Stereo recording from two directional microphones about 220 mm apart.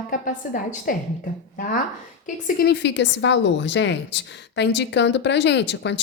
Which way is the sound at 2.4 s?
45° left (ahead or behind).